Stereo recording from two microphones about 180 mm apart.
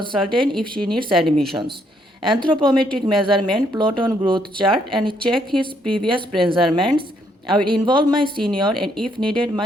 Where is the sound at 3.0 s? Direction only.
25° right (ahead or behind).